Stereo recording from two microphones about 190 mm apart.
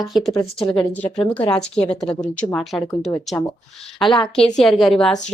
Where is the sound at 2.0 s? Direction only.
5° left (ahead or behind).